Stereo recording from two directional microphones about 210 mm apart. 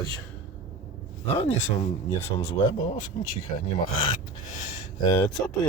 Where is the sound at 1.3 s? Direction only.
30° left (ahead or behind).